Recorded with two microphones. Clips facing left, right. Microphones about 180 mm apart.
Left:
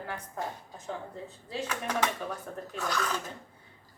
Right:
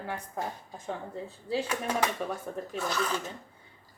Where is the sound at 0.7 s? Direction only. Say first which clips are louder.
Right 2 dB; 30° right (ahead or behind).